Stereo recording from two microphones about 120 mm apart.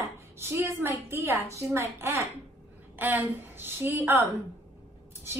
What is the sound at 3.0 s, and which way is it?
A woman's voice, 15° right (ahead or behind).